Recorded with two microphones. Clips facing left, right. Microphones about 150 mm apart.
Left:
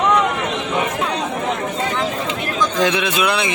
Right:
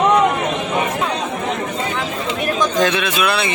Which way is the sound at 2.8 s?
15° left (ahead or behind).